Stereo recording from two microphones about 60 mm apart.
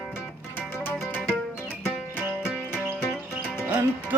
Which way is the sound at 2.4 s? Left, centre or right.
Centre.